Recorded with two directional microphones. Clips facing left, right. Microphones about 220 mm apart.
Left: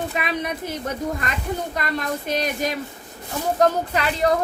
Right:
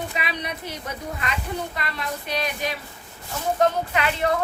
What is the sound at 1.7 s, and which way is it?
Speech, 45° left (ahead or behind).